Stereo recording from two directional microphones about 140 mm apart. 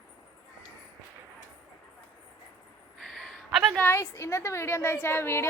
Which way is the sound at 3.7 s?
15° left (ahead or behind).